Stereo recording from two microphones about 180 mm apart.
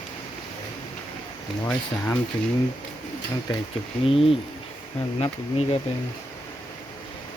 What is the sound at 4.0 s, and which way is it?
Speech, 30° left (ahead or behind).